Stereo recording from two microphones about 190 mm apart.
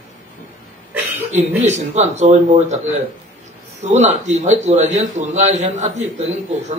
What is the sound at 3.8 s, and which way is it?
A man's voice, 35° right (ahead or behind).